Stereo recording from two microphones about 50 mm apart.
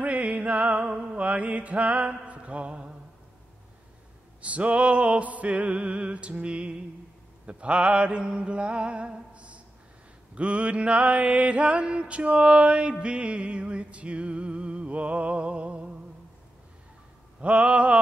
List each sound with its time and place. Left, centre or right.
0.0 s music: right
4.4 s music: right
17.4 s music: right